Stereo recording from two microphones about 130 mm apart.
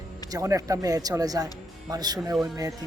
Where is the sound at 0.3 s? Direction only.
25° right (ahead or behind).